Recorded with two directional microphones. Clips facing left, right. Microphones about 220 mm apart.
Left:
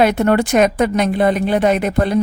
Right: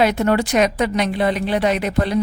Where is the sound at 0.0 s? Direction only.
55° left (ahead or behind).